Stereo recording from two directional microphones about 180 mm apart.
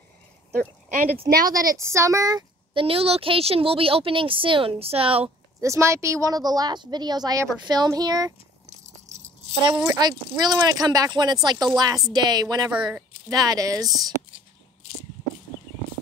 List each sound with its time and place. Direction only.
0.6 s speech: 50° right (ahead or behind)
1.5 s speech: 20° right (ahead or behind)
5.6 s speech: 15° right (ahead or behind)
8.6 s a sound: 40° right (ahead or behind)
9.8 s speech: 20° right (ahead or behind)